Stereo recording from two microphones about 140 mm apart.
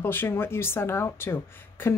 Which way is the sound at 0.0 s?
15° left (ahead or behind).